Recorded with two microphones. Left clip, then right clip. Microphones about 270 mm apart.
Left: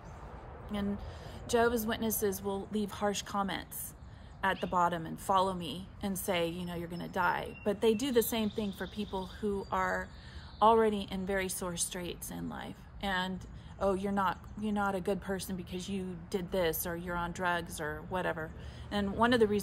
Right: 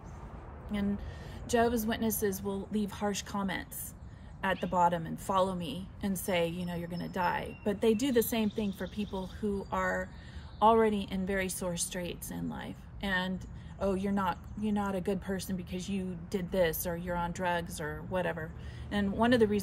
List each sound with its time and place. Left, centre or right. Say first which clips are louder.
1.5 s a woman's voice: even; centre